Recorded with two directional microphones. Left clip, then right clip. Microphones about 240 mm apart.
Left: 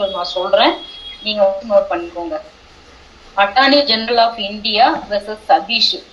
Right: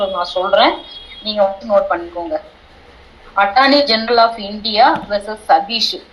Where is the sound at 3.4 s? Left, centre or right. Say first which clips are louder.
Even; centre.